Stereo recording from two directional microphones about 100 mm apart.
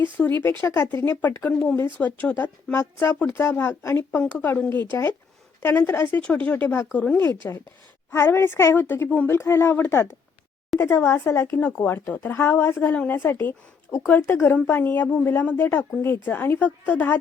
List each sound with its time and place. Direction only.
0.0 s speech: 20° left (ahead or behind)
4.2 s speech: 15° left (ahead or behind)